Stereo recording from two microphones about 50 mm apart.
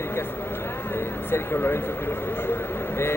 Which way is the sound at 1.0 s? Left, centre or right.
Left.